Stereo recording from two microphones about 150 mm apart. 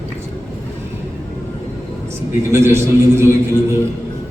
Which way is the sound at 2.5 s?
20° right (ahead or behind).